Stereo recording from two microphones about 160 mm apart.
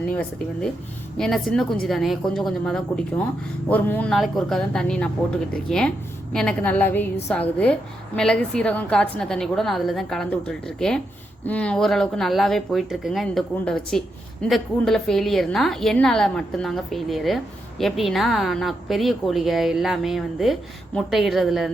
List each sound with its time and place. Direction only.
0.1 s a woman's voice: 10° left (ahead or behind)
4.1 s a woman's voice: centre (ahead or behind)